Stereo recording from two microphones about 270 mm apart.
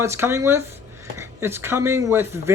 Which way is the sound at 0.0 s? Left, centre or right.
Centre.